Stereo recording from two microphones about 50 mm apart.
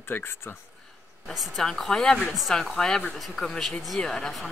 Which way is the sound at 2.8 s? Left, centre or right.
Centre.